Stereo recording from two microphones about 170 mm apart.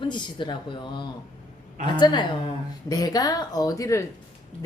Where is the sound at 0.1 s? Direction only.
25° left (ahead or behind).